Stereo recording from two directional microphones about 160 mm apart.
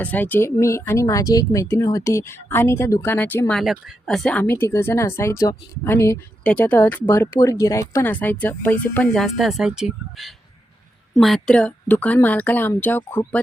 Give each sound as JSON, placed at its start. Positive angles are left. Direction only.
{"t": 0.0, "sound": "speech", "side_deg": 10}
{"t": 3.6, "sound": "speech", "side_deg": 0}